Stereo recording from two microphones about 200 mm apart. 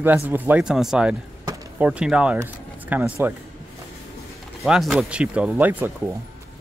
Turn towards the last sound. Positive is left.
turn(degrees=-10)  # may be behind; listen again after turning